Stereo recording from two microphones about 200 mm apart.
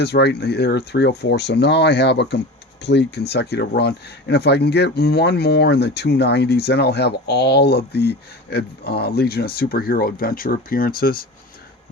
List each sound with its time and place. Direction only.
0.0 s speech: 55° left (ahead or behind)